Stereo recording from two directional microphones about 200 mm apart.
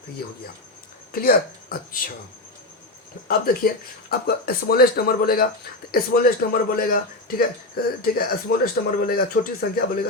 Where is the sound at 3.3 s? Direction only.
50° left (ahead or behind).